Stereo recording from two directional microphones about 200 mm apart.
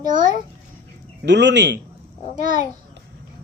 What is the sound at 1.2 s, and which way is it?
Speech, 60° right (ahead or behind).